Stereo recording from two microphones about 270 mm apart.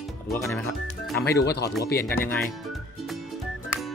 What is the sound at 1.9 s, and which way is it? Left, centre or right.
Speech, centre.